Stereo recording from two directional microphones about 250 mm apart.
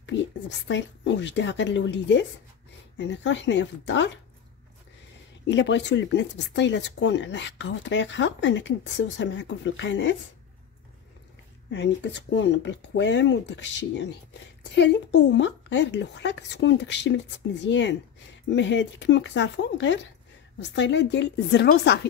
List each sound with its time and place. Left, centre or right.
0.0 s speech: left
5.5 s speech: left
11.7 s speech: left